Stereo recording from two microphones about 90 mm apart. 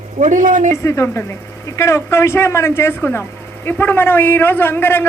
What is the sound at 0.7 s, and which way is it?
A man's voice, 35° left (ahead or behind).